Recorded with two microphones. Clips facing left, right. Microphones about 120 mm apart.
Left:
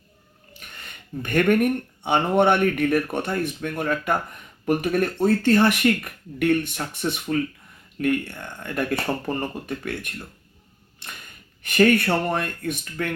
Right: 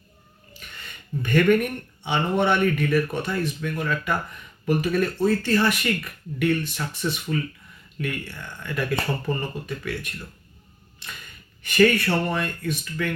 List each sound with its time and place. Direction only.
0.9 s speech: 55° left (ahead or behind)
11.6 s speech: 50° left (ahead or behind)